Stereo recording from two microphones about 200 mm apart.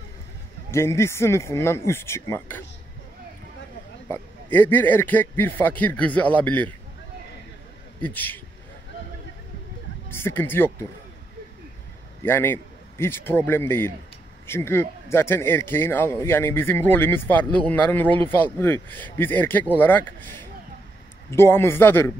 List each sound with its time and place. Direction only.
0.7 s a man's voice: 15° left (ahead or behind)
4.1 s a man's voice: 10° left (ahead or behind)
8.0 s a man's voice: 10° left (ahead or behind)
10.0 s speech: 10° left (ahead or behind)
12.3 s a man's voice: 10° left (ahead or behind)